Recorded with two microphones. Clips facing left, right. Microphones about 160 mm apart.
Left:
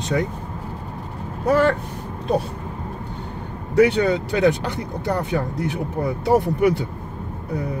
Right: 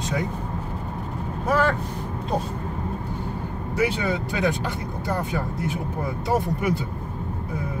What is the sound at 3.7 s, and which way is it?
Speech, 70° left (ahead or behind).